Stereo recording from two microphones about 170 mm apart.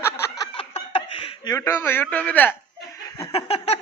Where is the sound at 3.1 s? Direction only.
30° left (ahead or behind).